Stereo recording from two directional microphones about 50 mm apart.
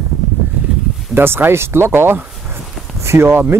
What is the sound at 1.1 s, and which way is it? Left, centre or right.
Speech, right.